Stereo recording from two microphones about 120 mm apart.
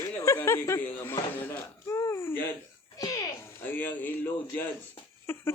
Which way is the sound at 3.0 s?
30° left (ahead or behind).